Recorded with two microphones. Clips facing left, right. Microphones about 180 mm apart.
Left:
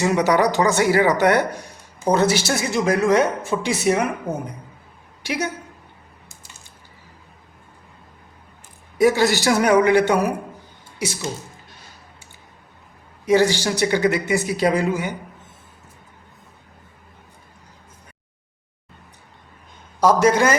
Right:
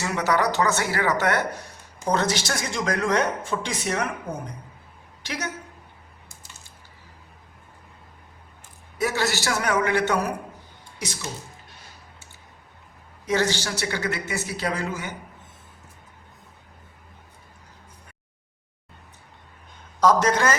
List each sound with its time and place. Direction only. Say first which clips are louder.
0.0 s speech: left 6 dB; 15° left (ahead or behind)
5.2 s a woman's voice: left 7 dB; 10° left (ahead or behind)
9.0 s speech: left 9 dB; 15° left (ahead or behind)
13.2 s speech: left 7 dB; 10° left (ahead or behind)
20.0 s speech: left 4 dB; 10° left (ahead or behind)